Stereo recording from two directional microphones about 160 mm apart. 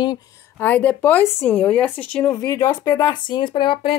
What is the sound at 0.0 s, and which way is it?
Speech, 25° left (ahead or behind).